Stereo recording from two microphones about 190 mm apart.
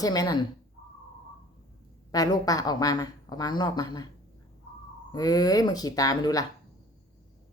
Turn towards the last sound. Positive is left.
turn(degrees=20)  # may be behind; listen again after turning